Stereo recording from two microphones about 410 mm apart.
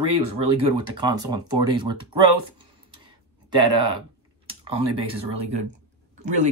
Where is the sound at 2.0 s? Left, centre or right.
Right.